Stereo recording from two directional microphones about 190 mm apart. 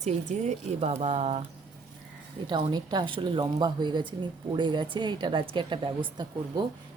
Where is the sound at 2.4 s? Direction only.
25° right (ahead or behind).